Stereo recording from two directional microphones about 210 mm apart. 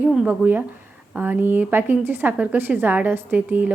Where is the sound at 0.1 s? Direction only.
5° right (ahead or behind).